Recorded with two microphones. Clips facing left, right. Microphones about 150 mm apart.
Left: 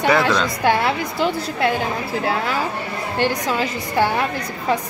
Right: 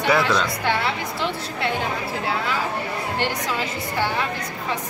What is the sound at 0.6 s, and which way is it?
Speech, 45° left (ahead or behind).